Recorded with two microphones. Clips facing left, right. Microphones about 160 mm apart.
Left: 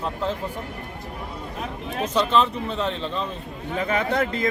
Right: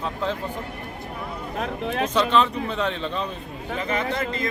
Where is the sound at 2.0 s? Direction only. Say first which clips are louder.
Left 1 dB; 5° left (ahead or behind).